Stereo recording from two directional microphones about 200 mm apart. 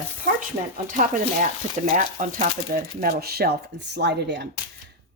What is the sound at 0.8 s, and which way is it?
Speech, 40° right (ahead or behind).